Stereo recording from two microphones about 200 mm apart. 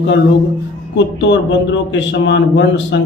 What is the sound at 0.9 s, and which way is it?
Speech, 65° left (ahead or behind).